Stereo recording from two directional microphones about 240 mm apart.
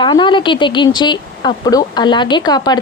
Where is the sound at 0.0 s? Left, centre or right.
Centre.